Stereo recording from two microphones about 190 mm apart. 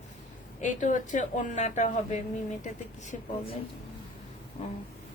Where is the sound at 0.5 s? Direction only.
40° left (ahead or behind).